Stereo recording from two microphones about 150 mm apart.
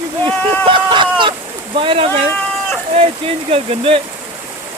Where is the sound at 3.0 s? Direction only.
40° right (ahead or behind).